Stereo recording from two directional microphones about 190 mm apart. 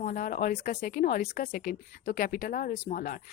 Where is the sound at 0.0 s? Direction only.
45° left (ahead or behind).